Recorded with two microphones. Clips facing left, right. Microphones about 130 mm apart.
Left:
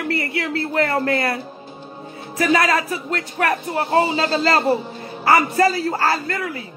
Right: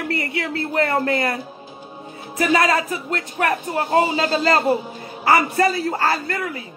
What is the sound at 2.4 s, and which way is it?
Speech, 25° right (ahead or behind).